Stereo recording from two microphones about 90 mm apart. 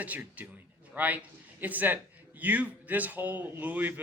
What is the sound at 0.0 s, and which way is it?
A man's voice, 15° right (ahead or behind).